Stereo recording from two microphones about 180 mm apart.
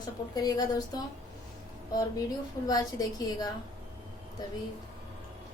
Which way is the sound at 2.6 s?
20° left (ahead or behind).